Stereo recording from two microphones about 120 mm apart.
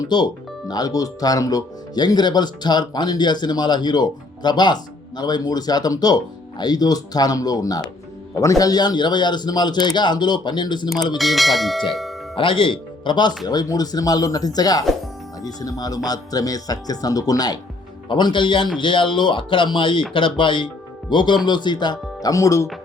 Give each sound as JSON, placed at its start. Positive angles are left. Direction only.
{"t": 0.0, "sound": "speech", "side_deg": 35}
{"t": 11.2, "sound": "speech", "side_deg": 0}
{"t": 12.4, "sound": "speech", "side_deg": 45}